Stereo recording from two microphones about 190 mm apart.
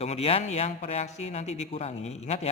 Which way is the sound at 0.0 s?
35° left (ahead or behind).